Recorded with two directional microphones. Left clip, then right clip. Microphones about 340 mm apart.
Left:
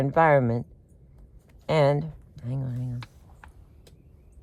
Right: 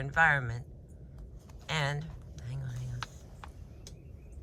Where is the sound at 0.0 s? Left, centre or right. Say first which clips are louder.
Left 7 dB; centre.